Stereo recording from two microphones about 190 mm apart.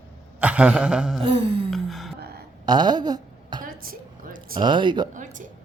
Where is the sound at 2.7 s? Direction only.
20° right (ahead or behind).